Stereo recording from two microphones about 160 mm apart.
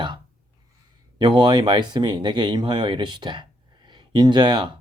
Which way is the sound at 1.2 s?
30° right (ahead or behind).